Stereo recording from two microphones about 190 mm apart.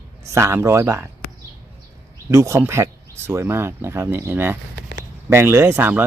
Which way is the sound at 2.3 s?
15° right (ahead or behind).